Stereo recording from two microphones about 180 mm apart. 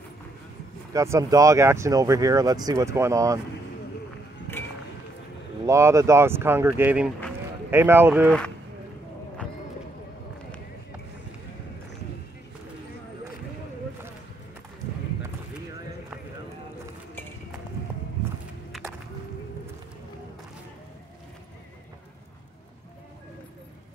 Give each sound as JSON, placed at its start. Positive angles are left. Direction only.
{"t": 0.9, "sound": "speech", "side_deg": -15}
{"t": 4.5, "sound": "run", "side_deg": 15}
{"t": 5.7, "sound": "speech", "side_deg": -15}
{"t": 18.7, "sound": "music", "side_deg": 0}